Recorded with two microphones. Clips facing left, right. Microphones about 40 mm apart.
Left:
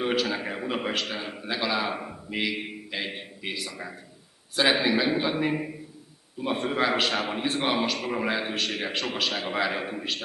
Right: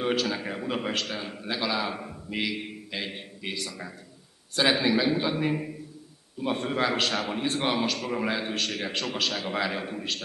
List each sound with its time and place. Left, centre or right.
0.0 s a man's voice: centre